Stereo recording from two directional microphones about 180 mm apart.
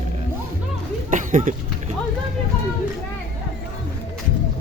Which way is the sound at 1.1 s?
45° right (ahead or behind).